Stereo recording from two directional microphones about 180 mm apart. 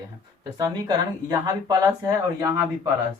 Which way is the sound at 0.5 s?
20° right (ahead or behind).